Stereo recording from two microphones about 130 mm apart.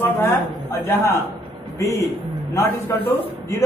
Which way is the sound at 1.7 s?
20° left (ahead or behind).